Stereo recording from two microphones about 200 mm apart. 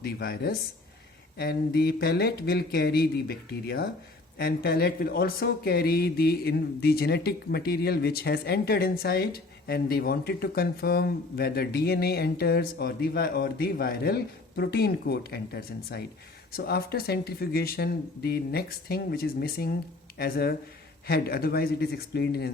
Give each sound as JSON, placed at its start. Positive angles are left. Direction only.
{"t": 0.0, "sound": "speech", "side_deg": 50}